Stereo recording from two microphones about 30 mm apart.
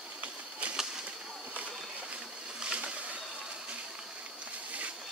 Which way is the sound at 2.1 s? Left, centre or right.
Right.